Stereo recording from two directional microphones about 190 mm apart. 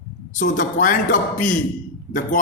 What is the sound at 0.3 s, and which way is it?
A man's voice, 45° left (ahead or behind).